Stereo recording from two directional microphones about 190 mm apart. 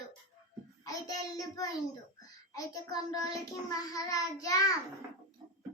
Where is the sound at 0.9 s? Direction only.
20° left (ahead or behind).